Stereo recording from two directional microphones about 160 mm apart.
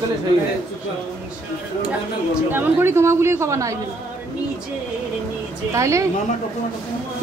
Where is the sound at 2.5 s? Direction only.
15° right (ahead or behind).